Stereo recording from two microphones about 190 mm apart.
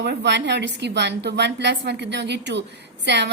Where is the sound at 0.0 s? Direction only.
65° right (ahead or behind).